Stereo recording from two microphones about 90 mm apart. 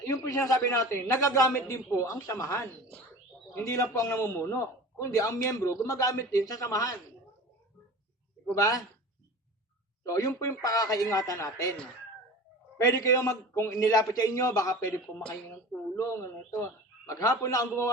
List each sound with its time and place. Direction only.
0.0 s a man's voice: 35° left (ahead or behind)
8.5 s a man's voice: 35° left (ahead or behind)
10.0 s a man's voice: 35° left (ahead or behind)
12.7 s a man's voice: 35° left (ahead or behind)